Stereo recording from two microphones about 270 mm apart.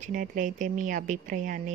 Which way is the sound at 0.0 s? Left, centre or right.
Right.